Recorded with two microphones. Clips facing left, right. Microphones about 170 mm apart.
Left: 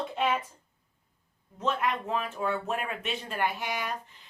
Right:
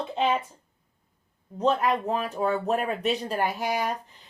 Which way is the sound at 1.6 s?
35° right (ahead or behind).